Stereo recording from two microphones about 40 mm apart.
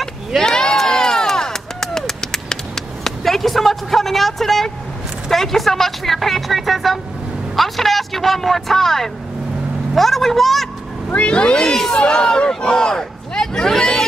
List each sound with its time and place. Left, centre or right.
0.4 s a sound: centre
5.3 s speech: centre
11.1 s speech: left; by 14.0 s centre